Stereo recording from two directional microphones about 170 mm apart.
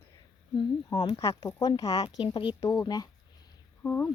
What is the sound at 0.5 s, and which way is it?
Speech, 25° left (ahead or behind).